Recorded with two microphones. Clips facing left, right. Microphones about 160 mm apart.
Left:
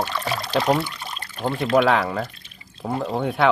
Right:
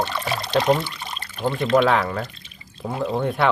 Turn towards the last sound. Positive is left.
turn(degrees=0)  # may be behind; listen again after turning